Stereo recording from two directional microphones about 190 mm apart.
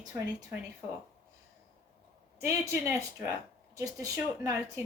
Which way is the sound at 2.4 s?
15° right (ahead or behind).